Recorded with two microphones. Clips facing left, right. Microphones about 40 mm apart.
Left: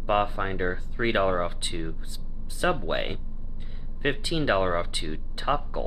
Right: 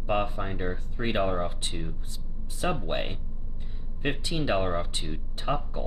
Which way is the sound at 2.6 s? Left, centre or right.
Left.